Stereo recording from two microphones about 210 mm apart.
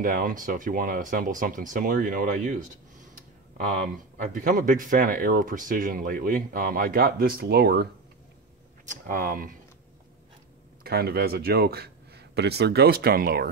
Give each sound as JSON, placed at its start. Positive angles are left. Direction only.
{"t": 0.0, "sound": "speech", "side_deg": -40}
{"t": 4.3, "sound": "speech", "side_deg": -40}
{"t": 10.8, "sound": "speech", "side_deg": -45}